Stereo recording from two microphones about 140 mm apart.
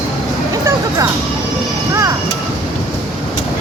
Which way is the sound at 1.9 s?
25° right (ahead or behind).